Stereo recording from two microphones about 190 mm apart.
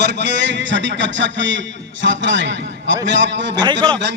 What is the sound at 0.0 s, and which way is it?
A man's voice, 65° right (ahead or behind).